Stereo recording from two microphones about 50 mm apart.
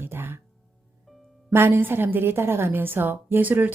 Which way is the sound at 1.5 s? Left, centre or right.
Right.